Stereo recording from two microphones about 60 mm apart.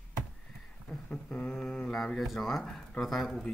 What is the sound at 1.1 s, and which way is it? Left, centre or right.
Humming, left.